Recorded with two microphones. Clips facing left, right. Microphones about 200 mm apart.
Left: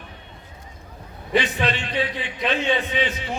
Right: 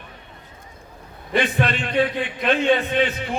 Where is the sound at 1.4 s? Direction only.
55° right (ahead or behind).